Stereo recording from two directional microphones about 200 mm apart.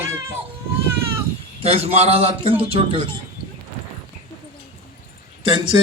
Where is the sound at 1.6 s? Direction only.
30° right (ahead or behind).